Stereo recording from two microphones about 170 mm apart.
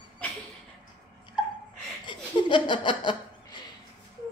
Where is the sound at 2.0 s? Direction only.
30° left (ahead or behind).